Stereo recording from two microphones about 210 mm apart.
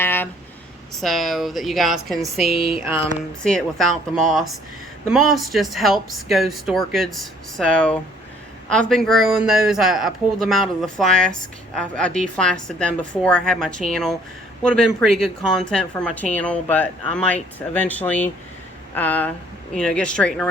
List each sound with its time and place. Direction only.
0.0 s a sound: 10° left (ahead or behind)
0.9 s a woman's voice: centre (ahead or behind)
2.5 s speech: 50° right (ahead or behind)
3.4 s a woman's voice: 5° left (ahead or behind)